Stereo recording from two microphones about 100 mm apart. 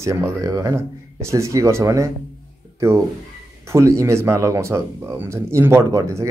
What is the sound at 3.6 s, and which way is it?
Speech, 30° right (ahead or behind).